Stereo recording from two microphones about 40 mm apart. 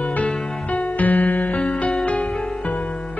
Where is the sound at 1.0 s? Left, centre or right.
Left.